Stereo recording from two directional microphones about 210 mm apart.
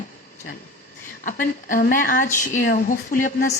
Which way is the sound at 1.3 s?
40° left (ahead or behind).